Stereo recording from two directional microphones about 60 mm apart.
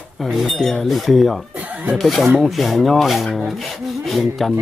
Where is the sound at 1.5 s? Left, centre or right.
Right.